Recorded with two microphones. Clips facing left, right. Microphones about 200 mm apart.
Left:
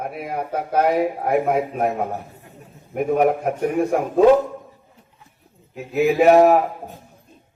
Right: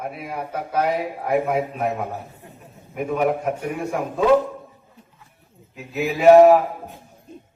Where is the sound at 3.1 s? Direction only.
50° left (ahead or behind).